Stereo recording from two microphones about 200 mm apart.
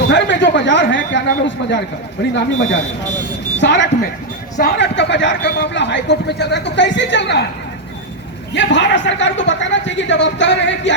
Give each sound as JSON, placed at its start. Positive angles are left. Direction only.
{"t": 0.1, "sound": "speech", "side_deg": 60}
{"t": 8.5, "sound": "speech", "side_deg": 60}